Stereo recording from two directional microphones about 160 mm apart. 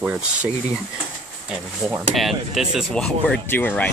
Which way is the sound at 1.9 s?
Centre (ahead or behind).